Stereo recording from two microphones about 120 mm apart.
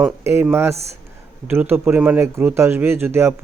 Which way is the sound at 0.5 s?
20° right (ahead or behind).